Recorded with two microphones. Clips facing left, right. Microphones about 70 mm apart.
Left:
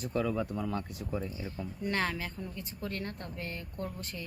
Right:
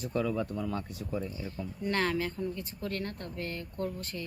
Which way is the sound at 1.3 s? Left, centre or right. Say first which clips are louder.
Right 1 dB; centre.